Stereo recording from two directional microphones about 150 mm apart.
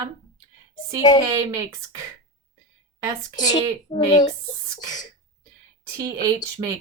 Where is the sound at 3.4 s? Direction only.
30° left (ahead or behind).